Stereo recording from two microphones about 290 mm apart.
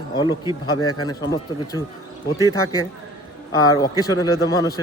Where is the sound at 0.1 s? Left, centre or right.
Centre.